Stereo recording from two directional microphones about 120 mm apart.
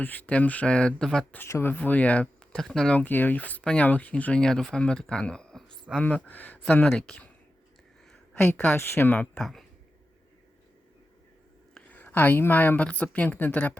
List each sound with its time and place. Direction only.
0.0 s speech: 15° left (ahead or behind)
1.4 s speech: 20° left (ahead or behind)
8.4 s speech: 15° left (ahead or behind)
11.7 s a woman's voice: 15° left (ahead or behind)